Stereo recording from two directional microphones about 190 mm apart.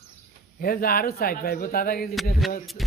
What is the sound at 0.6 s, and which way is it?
Speech, 50° left (ahead or behind).